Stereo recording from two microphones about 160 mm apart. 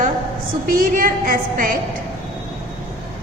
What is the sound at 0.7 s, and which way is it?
A woman's voice, 65° right (ahead or behind).